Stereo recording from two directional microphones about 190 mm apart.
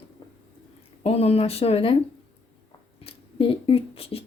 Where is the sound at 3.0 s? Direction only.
30° left (ahead or behind).